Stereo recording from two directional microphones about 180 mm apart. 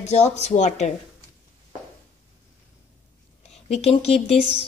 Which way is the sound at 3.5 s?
35° left (ahead or behind).